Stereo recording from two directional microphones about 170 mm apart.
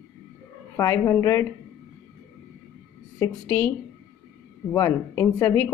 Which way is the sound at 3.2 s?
10° left (ahead or behind).